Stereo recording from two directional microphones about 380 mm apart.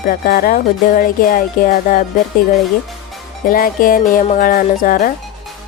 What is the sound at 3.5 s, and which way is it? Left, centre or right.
Speech, left.